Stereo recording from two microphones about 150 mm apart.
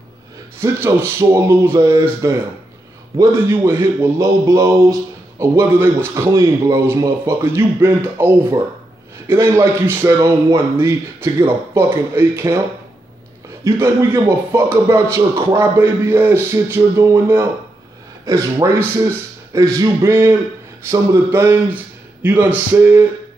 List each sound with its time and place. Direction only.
0.6 s a man's voice: 15° right (ahead or behind)
13.7 s a man's voice: 20° right (ahead or behind)